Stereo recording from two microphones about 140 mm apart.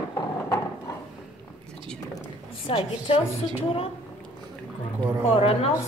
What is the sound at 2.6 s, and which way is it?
Speech, 45° left (ahead or behind).